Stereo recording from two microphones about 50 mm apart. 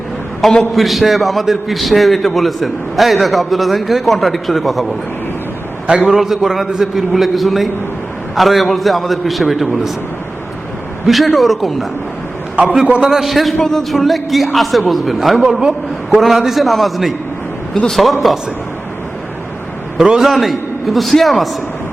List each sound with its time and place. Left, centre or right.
0.7 s a man's voice: centre
6.1 s a man's voice: centre
11.0 s a man's voice: centre
12.7 s a man's voice: centre
13.1 s a man's voice: centre
20.0 s a man's voice: centre